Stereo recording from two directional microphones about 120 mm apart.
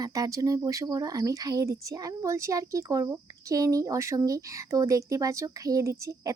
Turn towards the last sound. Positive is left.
turn(degrees=-25)  # may be behind; listen again after turning